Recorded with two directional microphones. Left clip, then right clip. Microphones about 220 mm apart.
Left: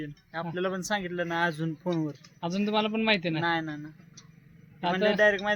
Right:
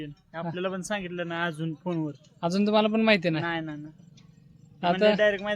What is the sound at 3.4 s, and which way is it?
Speech, 5° right (ahead or behind).